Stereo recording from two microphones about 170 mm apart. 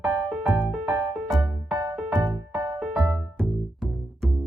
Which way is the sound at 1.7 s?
20° right (ahead or behind).